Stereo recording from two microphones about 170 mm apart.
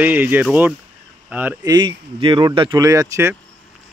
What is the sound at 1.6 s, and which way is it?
Speech, 25° right (ahead or behind).